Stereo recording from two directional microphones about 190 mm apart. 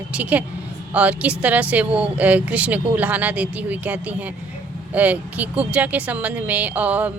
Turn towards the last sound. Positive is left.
turn(degrees=-5)  # may be behind; listen again after turning